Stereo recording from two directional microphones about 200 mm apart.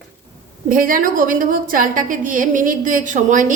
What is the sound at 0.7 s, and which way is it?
A woman's voice, 45° right (ahead or behind).